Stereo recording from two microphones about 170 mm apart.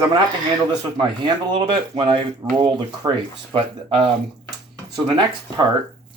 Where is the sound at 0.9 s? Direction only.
30° right (ahead or behind).